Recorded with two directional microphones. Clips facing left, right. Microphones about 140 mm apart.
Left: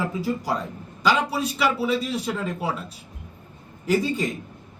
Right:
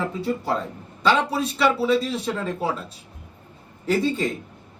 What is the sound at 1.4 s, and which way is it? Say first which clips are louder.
Speech: right 2 dB; 30° right (ahead or behind).